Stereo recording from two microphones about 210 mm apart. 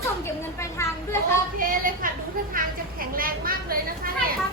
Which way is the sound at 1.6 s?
40° right (ahead or behind).